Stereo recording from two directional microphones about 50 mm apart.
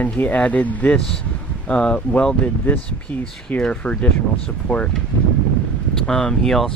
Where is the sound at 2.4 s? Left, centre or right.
Left.